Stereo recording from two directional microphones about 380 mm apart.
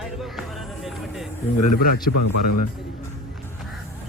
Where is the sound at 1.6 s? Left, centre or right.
Left.